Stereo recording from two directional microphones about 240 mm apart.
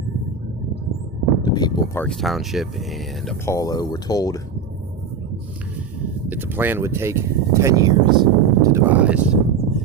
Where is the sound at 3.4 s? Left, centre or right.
Centre.